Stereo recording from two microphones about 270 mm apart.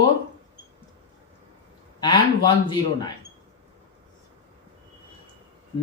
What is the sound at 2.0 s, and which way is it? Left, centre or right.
Speech, centre.